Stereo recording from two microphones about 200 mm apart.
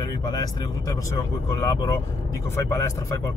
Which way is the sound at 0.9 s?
15° left (ahead or behind).